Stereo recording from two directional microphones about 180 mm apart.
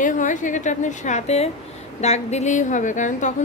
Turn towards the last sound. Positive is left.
turn(degrees=45)  # may be behind; listen again after turning